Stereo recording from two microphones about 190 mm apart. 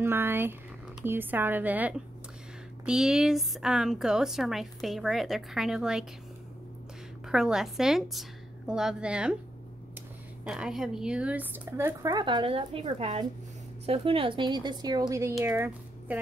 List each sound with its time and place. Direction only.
0.0 s a woman's voice: 10° right (ahead or behind)
7.2 s a woman's voice: 5° right (ahead or behind)
10.4 s a woman's voice: 5° right (ahead or behind)